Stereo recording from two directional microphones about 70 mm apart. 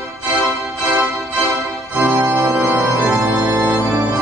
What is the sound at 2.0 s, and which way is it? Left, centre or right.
Organ, right.